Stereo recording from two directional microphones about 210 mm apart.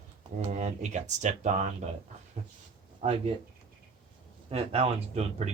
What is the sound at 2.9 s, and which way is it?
Speech, 30° right (ahead or behind).